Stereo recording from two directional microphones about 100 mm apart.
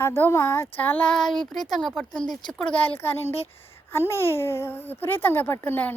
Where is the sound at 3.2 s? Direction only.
90° left.